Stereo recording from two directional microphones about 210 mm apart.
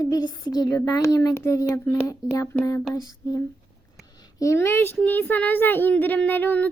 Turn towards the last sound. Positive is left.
turn(degrees=10)  # may be behind; listen again after turning